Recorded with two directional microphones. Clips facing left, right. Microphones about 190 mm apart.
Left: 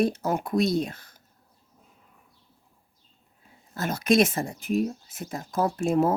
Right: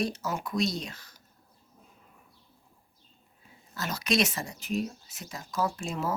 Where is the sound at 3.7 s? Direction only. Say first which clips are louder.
Left 7 dB; 50° left (ahead or behind).